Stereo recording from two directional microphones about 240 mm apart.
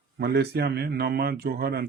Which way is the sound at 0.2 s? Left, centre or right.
Right.